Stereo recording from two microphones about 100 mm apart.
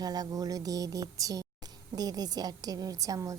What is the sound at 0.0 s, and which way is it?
A woman's voice, 40° right (ahead or behind).